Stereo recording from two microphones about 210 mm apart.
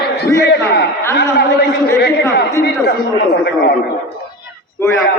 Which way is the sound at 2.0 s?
50° left (ahead or behind).